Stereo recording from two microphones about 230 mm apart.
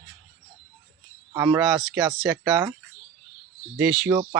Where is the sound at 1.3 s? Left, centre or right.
Centre.